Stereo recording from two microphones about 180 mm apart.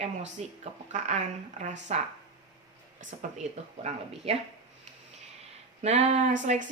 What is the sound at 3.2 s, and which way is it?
A woman's voice, 45° right (ahead or behind).